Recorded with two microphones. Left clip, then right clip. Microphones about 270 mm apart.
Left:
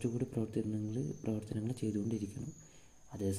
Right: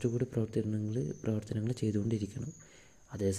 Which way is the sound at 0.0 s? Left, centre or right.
Right.